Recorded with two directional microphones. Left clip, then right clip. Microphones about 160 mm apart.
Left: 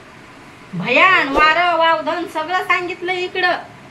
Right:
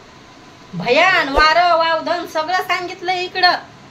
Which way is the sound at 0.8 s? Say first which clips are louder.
Left 1 dB; 15° right (ahead or behind).